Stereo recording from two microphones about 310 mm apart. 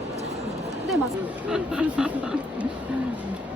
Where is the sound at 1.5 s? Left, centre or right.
Centre.